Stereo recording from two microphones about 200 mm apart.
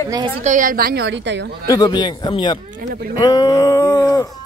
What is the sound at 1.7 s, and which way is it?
Speech, 20° left (ahead or behind).